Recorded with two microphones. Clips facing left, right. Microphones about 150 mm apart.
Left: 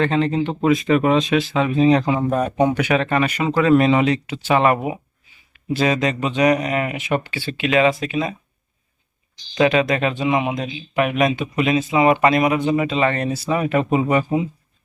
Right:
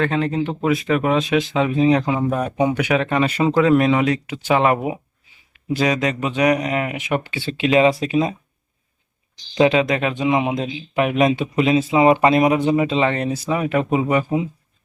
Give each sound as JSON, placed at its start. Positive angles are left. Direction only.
{"t": 0.0, "sound": "speech", "side_deg": -5}
{"t": 3.2, "sound": "speech", "side_deg": -30}
{"t": 3.5, "sound": "speech", "side_deg": -15}
{"t": 3.8, "sound": "speech", "side_deg": 0}
{"t": 4.3, "sound": "speech", "side_deg": -15}
{"t": 9.6, "sound": "speech", "side_deg": -20}